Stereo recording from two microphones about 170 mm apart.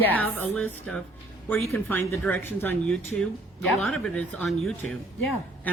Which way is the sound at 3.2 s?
Centre (ahead or behind).